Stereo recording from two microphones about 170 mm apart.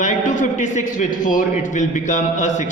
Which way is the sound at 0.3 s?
45° left (ahead or behind).